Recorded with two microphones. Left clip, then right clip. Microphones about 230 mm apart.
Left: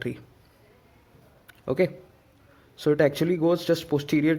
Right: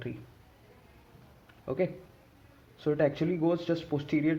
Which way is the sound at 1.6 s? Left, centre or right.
Left.